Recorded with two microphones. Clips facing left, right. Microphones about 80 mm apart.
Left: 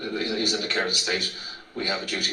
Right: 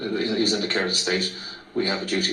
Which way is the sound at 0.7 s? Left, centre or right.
Right.